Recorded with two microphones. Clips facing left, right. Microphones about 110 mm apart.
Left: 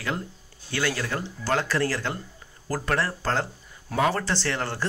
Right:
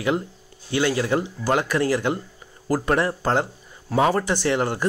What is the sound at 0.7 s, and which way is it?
Speech, 20° right (ahead or behind).